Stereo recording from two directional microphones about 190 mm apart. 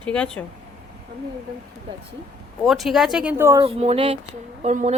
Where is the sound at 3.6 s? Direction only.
30° right (ahead or behind).